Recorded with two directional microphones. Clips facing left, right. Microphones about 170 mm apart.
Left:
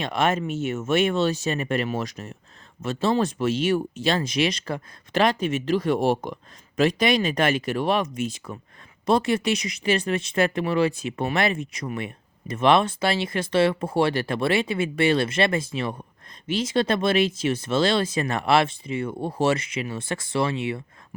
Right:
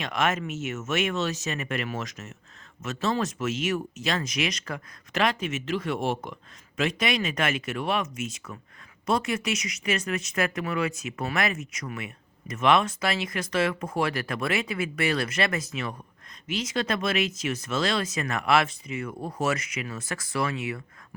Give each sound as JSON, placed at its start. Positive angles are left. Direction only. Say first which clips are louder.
{"t": 0.0, "sound": "speech", "louder": "left 4 dB", "side_deg": 30}